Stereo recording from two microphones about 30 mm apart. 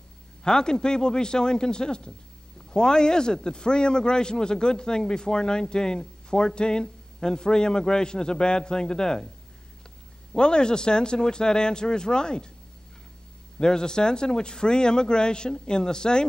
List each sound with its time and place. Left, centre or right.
0.4 s a man's voice: left
10.3 s a man's voice: left
13.6 s a man's voice: left